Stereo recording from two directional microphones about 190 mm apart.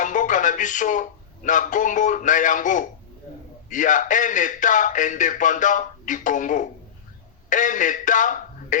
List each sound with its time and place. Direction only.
0.0 s radio: 40° left (ahead or behind)
1.5 s a man's voice: 45° left (ahead or behind)